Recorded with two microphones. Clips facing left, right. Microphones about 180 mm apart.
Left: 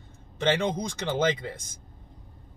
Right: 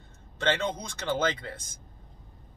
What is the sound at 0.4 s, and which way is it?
Speech, 15° left (ahead or behind).